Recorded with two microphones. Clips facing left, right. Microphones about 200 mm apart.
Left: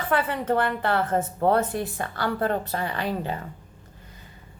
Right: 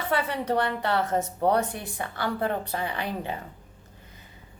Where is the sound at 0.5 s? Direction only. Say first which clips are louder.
Left 2 dB; 20° right (ahead or behind).